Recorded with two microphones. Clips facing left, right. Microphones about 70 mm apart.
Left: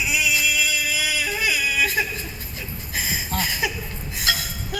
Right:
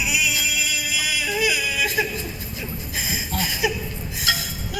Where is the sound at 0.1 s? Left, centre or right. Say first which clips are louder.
Left 2 dB; left.